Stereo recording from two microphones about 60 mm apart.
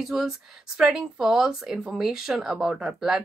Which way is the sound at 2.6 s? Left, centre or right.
Centre.